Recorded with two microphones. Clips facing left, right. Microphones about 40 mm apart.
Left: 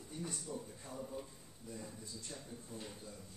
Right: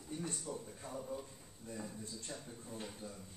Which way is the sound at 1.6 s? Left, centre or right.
Right.